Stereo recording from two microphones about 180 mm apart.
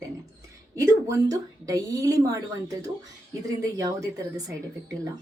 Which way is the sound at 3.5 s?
20° right (ahead or behind).